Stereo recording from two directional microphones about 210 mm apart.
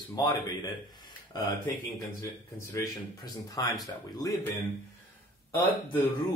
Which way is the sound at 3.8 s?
15° left (ahead or behind).